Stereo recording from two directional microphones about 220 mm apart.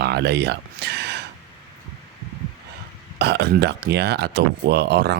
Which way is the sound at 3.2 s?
50° right (ahead or behind).